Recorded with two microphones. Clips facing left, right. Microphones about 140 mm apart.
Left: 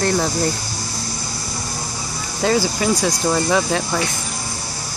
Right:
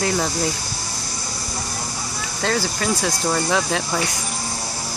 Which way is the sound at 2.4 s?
5° left (ahead or behind).